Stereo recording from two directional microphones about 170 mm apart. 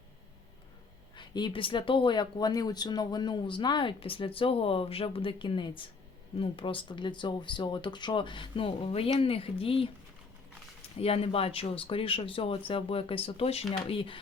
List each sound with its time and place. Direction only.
1.1 s speech: 25° left (ahead or behind)
10.9 s speech: 35° left (ahead or behind)